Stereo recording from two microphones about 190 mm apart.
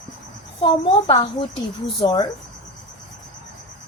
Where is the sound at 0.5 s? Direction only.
30° left (ahead or behind).